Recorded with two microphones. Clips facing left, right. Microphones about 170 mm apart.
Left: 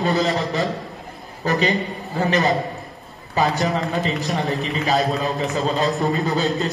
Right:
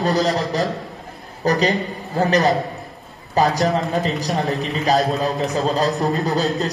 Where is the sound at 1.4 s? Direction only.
40° right (ahead or behind).